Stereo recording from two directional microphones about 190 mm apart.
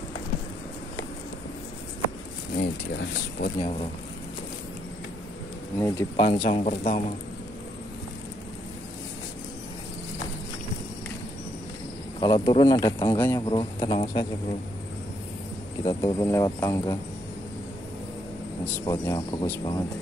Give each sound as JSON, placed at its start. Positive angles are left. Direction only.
{"t": 2.5, "sound": "speech", "side_deg": 55}
{"t": 3.5, "sound": "speech", "side_deg": 30}
{"t": 5.8, "sound": "a man's voice", "side_deg": 15}
{"t": 6.6, "sound": "speech", "side_deg": 40}
{"t": 12.2, "sound": "a man's voice", "side_deg": 25}
{"t": 15.8, "sound": "a man's voice", "side_deg": 25}
{"t": 18.9, "sound": "a man's voice", "side_deg": 15}